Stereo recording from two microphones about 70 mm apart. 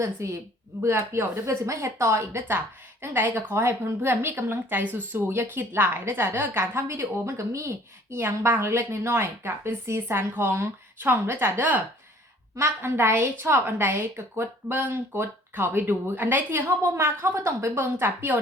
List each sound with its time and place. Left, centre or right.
0.0 s a woman's voice: right
17.9 s speech: right